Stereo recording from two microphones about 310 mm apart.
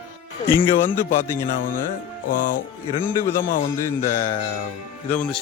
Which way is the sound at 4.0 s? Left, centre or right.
Centre.